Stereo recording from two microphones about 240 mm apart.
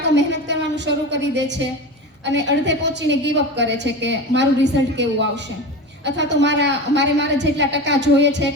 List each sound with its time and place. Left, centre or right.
0.1 s a sound: right
2.3 s a woman's voice: right
6.1 s a woman's voice: right